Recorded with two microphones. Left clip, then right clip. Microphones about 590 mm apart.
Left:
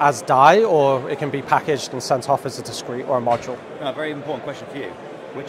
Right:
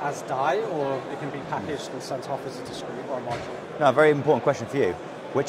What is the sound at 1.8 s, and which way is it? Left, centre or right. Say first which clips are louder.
Speech: left 10 dB; left.